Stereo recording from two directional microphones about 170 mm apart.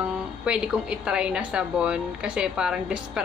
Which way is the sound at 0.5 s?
5° right (ahead or behind).